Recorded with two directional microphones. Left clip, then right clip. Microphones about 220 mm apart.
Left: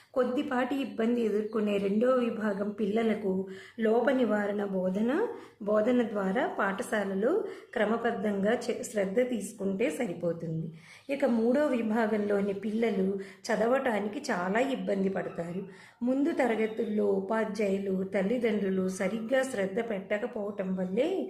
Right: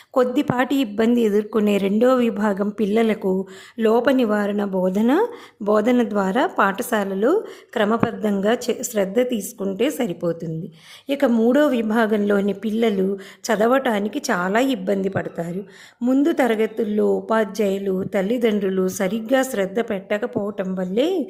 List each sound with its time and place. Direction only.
0.1 s a woman's voice: 45° right (ahead or behind)